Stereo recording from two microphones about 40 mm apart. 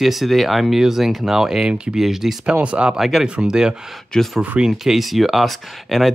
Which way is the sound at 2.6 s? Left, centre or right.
Right.